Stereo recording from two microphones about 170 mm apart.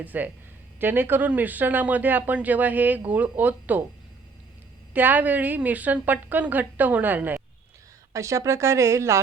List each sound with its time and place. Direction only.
0.0 s speech: 10° right (ahead or behind)
4.9 s speech: 10° right (ahead or behind)